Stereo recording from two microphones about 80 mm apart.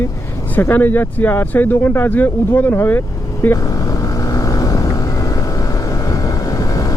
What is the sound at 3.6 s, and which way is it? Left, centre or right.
Vehicle, left.